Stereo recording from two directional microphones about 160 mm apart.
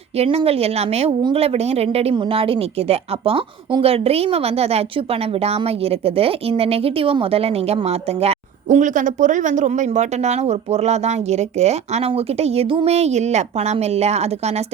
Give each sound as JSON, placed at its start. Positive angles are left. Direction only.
{"t": 0.2, "sound": "a woman's voice", "side_deg": -40}